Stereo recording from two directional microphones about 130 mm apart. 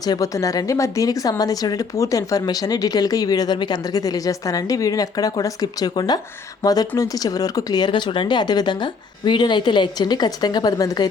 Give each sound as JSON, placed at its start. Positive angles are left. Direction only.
{"t": 0.0, "sound": "a woman's voice", "side_deg": 30}